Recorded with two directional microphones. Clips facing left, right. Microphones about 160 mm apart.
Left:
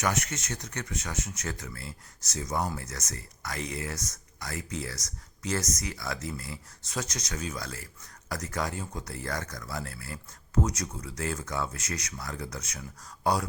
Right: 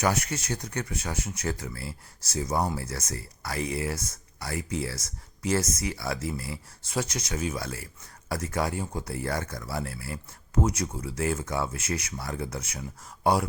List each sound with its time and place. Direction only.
0.0 s speech: 30° right (ahead or behind)